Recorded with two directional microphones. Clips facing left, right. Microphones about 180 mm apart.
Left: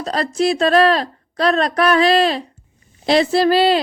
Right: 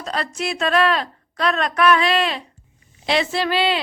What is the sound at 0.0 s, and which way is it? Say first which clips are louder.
Speech: left 8 dB; 35° left (ahead or behind).